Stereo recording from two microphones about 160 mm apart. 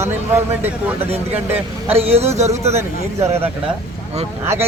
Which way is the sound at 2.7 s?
15° right (ahead or behind).